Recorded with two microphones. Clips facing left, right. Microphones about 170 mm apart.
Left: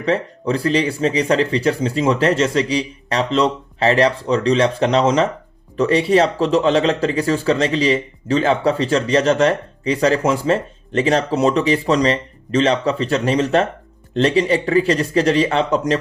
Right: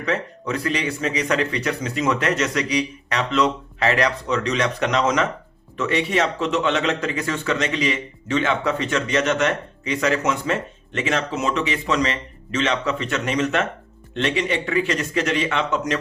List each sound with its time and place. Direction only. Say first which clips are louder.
0.0 s speech: left 5 dB; 30° left (ahead or behind)